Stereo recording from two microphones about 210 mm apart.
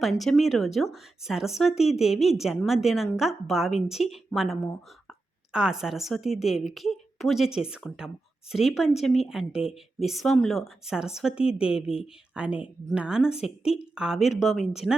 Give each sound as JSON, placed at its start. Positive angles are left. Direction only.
{"t": 0.0, "sound": "speech", "side_deg": 0}
{"t": 13.3, "sound": "speech", "side_deg": 30}
{"t": 13.9, "sound": "speech", "side_deg": -5}